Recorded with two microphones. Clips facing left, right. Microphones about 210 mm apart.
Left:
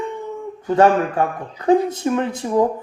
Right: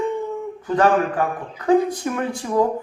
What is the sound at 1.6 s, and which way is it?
Speech, 25° left (ahead or behind).